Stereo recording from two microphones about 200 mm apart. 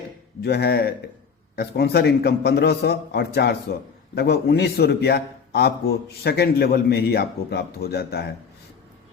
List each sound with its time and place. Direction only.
0.4 s a man's voice: 55° left (ahead or behind)